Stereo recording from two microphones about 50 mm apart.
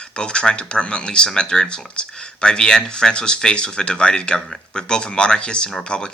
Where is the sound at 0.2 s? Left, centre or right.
Centre.